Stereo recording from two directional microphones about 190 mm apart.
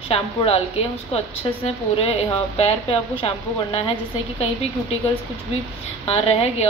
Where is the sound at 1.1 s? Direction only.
30° left (ahead or behind).